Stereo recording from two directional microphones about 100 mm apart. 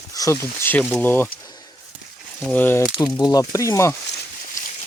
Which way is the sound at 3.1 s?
40° left (ahead or behind).